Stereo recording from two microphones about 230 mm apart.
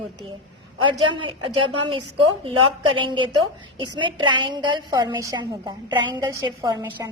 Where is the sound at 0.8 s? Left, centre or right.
Right.